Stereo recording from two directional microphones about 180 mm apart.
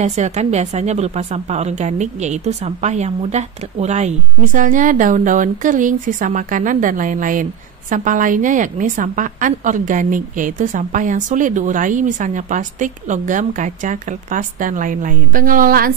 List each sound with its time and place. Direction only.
0.0 s a woman's voice: 40° right (ahead or behind)